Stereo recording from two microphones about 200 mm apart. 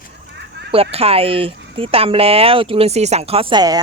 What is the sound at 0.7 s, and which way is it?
Speech, 30° right (ahead or behind).